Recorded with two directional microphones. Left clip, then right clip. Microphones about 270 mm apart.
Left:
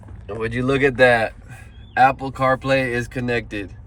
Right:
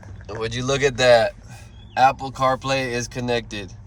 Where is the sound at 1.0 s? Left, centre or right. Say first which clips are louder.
Right 1 dB; centre.